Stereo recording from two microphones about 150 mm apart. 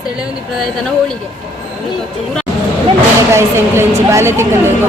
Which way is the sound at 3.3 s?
20° right (ahead or behind).